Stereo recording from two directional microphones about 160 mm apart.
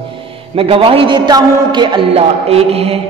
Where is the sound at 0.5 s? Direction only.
35° right (ahead or behind).